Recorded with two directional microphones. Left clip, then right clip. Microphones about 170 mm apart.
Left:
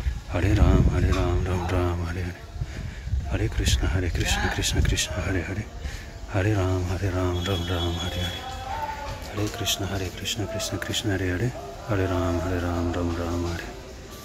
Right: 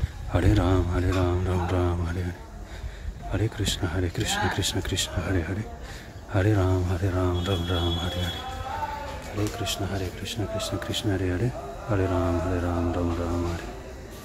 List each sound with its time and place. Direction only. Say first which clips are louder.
0.3 s speech: right 1 dB; 20° right (ahead or behind)
7.0 s speech: even; centre (ahead or behind)
9.4 s speech: left 2 dB; 5° left (ahead or behind)